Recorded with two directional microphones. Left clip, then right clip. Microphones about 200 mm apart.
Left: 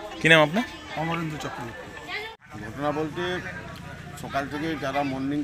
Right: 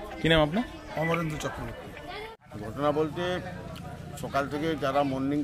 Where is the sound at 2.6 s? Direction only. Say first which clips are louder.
Right 1 dB; 30° right (ahead or behind).